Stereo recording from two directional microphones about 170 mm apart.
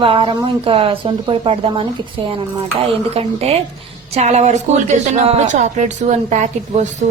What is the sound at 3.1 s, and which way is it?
A woman's voice, 35° right (ahead or behind).